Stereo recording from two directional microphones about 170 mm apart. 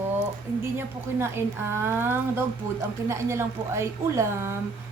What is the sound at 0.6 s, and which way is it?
A woman's voice, 15° right (ahead or behind).